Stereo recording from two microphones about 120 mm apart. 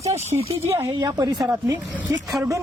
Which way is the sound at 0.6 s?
25° right (ahead or behind).